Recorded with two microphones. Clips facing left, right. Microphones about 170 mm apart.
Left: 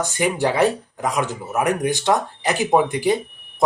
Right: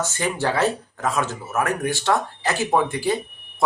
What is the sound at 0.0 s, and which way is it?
Speech, 15° left (ahead or behind).